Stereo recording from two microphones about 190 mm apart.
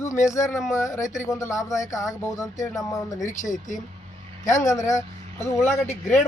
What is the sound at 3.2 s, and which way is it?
Speech, 40° left (ahead or behind).